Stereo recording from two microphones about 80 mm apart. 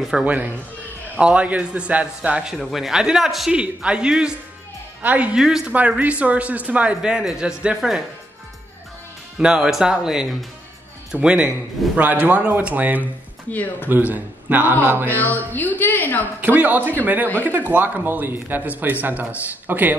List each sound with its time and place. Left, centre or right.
0.1 s speech: centre
2.5 s speech: centre
5.7 s speech: centre
9.4 s speech: centre
13.5 s a woman's voice: left
13.8 s speech: right
15.1 s a woman's voice: left
16.3 s speech: right